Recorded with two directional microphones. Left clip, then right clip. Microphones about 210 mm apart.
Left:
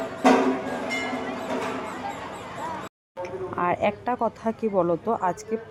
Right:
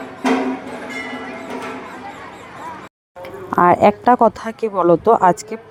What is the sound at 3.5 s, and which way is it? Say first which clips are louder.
Speech: right 13 dB; 30° right (ahead or behind).